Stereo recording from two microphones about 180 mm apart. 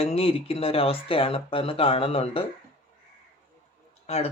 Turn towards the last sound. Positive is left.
turn(degrees=35)  # may be behind; listen again after turning